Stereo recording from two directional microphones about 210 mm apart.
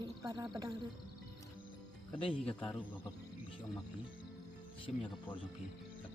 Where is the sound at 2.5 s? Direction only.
5° left (ahead or behind).